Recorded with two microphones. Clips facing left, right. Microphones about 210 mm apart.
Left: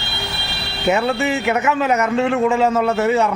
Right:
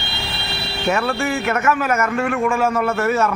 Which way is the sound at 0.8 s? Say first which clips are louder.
Left 3 dB; 20° left (ahead or behind).